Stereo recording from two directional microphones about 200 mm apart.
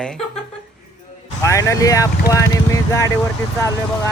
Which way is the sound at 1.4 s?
15° left (ahead or behind).